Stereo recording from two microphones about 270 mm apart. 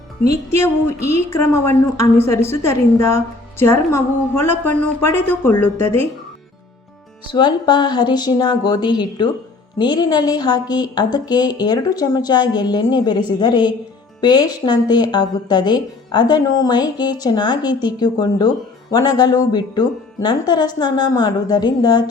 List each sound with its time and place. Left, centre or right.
1.0 s speech: centre
7.3 s speech: centre